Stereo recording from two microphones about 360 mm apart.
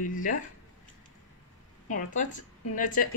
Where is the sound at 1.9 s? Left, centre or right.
Left.